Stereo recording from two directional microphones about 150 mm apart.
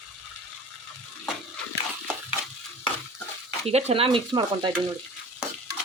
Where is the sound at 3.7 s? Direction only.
45° right (ahead or behind).